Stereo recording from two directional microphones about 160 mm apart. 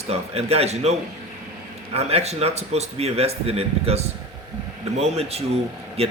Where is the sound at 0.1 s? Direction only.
40° right (ahead or behind).